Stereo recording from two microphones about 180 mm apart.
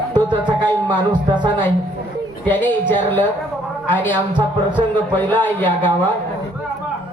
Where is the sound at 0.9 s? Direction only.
25° right (ahead or behind).